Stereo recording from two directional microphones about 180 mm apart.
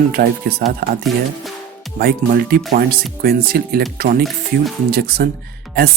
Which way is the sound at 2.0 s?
60° right (ahead or behind).